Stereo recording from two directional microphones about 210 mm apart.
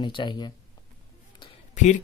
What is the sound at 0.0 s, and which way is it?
Speech, 20° left (ahead or behind).